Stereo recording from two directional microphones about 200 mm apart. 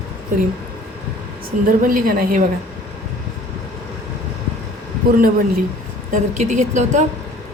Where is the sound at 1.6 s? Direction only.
45° right (ahead or behind).